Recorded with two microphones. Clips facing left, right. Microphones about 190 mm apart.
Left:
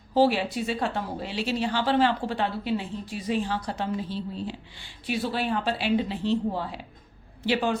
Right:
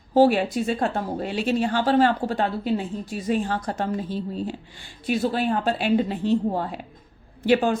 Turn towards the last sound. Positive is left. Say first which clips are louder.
# right 5 dB
turn(degrees=-50)  # may be behind; listen again after turning